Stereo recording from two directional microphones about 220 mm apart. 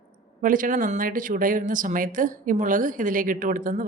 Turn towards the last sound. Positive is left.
turn(degrees=-35)  # may be behind; listen again after turning